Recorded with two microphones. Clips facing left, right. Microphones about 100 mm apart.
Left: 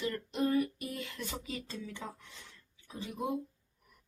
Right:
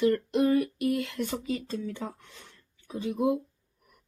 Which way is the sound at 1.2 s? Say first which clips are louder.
Right 9 dB; 50° right (ahead or behind).